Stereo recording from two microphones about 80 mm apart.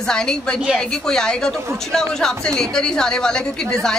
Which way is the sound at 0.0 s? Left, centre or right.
Centre.